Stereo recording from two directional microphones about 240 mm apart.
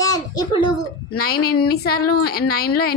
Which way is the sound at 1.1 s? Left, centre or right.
Left.